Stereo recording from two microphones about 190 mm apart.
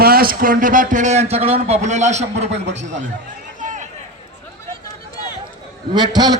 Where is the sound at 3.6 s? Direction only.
40° right (ahead or behind).